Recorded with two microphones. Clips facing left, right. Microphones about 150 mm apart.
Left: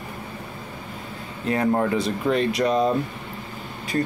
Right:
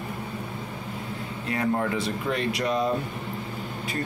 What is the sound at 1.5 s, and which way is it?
Speech, 35° left (ahead or behind).